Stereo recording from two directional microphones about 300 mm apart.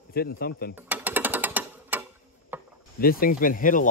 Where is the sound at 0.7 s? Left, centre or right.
Centre.